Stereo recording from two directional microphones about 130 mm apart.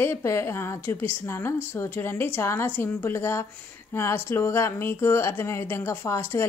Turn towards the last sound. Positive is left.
turn(degrees=20)  # may be behind; listen again after turning